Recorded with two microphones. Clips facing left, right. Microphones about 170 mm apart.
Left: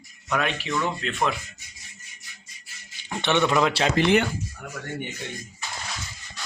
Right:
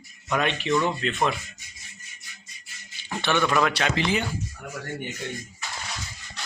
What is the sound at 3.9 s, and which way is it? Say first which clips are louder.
Speech: left 6 dB; 65° left (ahead or behind).